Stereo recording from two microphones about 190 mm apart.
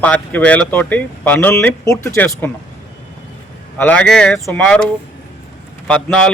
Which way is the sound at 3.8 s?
5° left (ahead or behind).